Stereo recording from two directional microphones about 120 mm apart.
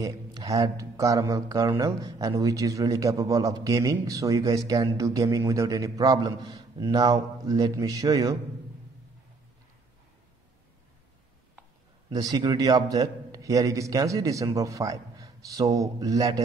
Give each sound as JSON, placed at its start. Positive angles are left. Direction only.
{"t": 0.0, "sound": "a man's voice", "side_deg": -30}
{"t": 12.1, "sound": "speech", "side_deg": -35}